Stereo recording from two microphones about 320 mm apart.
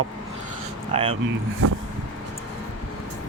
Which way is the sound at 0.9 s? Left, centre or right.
Centre.